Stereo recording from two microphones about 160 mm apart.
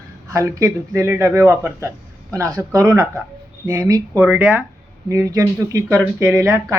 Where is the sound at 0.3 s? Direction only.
20° right (ahead or behind).